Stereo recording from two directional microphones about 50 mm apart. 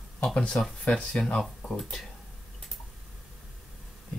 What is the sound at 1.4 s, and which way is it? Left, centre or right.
Speech, centre.